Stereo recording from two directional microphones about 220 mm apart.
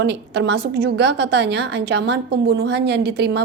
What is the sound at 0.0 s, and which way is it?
A woman's voice, 50° right (ahead or behind).